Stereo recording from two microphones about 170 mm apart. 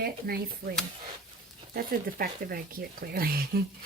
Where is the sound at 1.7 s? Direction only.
60° right (ahead or behind).